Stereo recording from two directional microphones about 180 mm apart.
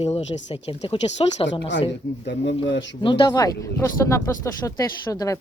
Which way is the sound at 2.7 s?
90° left.